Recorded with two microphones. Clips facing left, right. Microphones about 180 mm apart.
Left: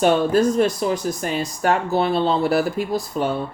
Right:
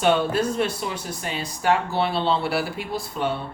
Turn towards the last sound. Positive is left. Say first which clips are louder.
# left 5 dB
turn(degrees=45)  # may be behind; listen again after turning